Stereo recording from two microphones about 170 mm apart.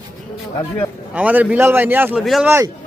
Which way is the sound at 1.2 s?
10° right (ahead or behind).